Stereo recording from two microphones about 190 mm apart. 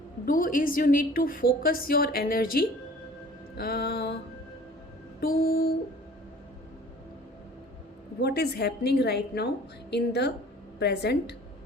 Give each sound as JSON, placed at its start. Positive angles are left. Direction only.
{"t": 0.3, "sound": "a woman's voice", "side_deg": 45}
{"t": 5.2, "sound": "a woman's voice", "side_deg": 50}
{"t": 8.2, "sound": "a woman's voice", "side_deg": 55}